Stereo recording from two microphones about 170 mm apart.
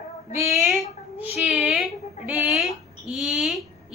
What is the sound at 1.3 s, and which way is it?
A woman's voice, centre (ahead or behind).